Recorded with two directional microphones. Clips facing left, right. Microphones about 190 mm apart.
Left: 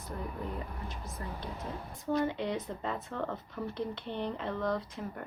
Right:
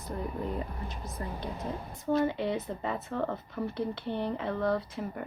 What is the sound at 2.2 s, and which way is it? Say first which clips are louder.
Speech: right 3 dB; 5° right (ahead or behind).